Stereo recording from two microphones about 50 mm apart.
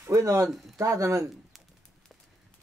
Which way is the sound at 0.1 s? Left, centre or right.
Right.